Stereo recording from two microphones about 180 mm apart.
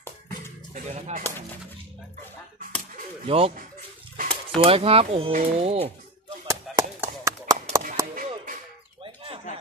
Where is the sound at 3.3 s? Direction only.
35° right (ahead or behind).